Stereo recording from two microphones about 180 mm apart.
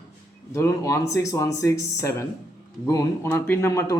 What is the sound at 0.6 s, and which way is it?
Speech, 15° left (ahead or behind).